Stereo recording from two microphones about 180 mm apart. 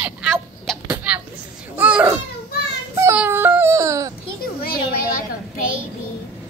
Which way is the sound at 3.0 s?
15° right (ahead or behind).